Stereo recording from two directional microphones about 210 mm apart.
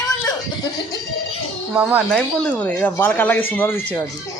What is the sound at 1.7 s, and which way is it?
Speech, 5° right (ahead or behind).